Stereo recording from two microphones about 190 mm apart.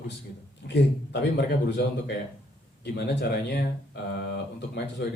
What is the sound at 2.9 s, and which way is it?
Speech, 60° left (ahead or behind).